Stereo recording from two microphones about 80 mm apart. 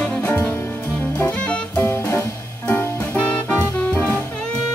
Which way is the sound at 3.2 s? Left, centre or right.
Centre.